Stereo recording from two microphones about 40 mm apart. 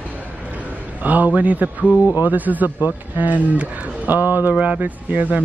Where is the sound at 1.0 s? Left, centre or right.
Right.